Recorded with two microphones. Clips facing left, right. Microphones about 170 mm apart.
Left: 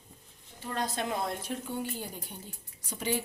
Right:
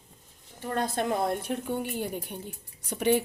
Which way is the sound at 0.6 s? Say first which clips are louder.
Right 5 dB; 55° right (ahead or behind).